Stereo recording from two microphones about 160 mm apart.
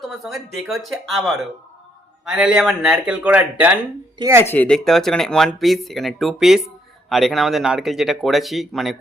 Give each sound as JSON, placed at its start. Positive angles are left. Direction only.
{"t": 0.0, "sound": "speech", "side_deg": 0}
{"t": 4.4, "sound": "speech", "side_deg": 10}